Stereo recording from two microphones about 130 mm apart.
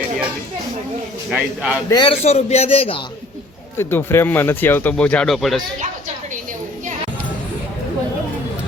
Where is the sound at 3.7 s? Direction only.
20° left (ahead or behind); by 5.6 s centre (ahead or behind).